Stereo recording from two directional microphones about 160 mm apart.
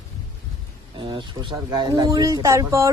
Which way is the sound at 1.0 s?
30° right (ahead or behind).